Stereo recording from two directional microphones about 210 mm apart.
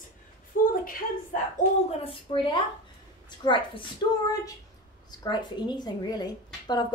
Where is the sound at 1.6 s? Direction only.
25° left (ahead or behind).